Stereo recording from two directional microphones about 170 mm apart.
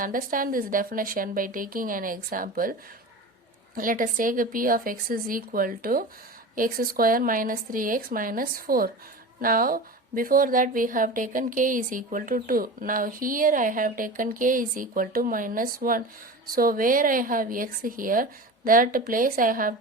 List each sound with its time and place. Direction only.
0.0 s a woman's voice: 55° right (ahead or behind)
3.8 s a woman's voice: 55° right (ahead or behind)